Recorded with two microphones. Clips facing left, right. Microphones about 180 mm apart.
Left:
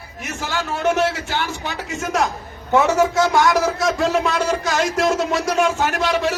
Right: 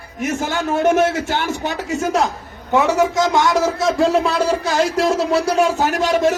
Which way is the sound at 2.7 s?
15° right (ahead or behind).